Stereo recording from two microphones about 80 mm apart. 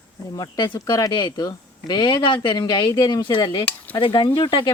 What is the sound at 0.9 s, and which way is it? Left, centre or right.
Speech, left.